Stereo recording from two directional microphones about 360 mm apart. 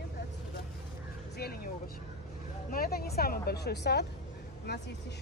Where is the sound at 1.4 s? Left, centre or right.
Left.